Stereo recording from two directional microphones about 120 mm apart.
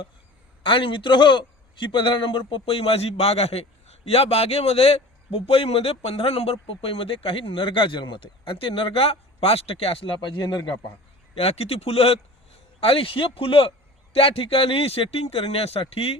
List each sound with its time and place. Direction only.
0.6 s a man's voice: 45° left (ahead or behind)
11.3 s a man's voice: 55° left (ahead or behind)